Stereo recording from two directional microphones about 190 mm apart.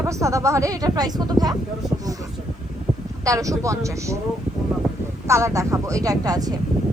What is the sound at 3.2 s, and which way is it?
Speech, 15° right (ahead or behind).